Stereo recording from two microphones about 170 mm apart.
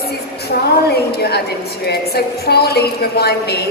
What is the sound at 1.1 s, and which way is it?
A woman's voice, 70° left (ahead or behind).